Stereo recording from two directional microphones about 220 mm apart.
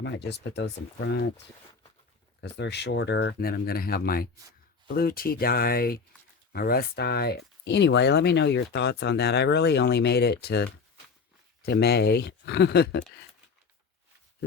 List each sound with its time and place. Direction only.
0.0 s speech: 50° left (ahead or behind)
2.4 s speech: 50° left (ahead or behind)